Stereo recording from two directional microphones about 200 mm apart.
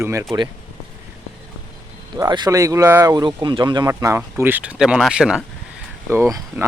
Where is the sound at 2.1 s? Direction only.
20° right (ahead or behind); by 5.4 s 5° right (ahead or behind).